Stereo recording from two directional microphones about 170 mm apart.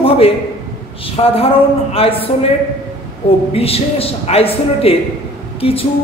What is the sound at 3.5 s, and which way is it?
A man's voice, 35° left (ahead or behind).